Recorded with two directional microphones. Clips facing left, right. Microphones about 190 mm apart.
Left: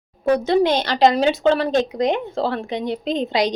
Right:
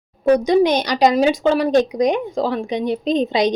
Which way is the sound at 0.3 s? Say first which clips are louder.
Right 1 dB; 15° right (ahead or behind).